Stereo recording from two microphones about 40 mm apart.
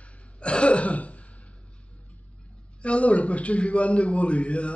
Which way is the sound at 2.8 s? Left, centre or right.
Left.